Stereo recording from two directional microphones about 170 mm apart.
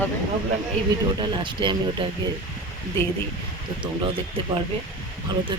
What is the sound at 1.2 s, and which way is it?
Speech, 30° right (ahead or behind).